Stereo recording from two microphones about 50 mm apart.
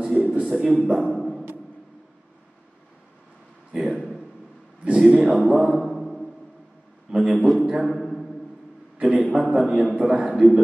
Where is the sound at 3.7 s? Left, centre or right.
Centre.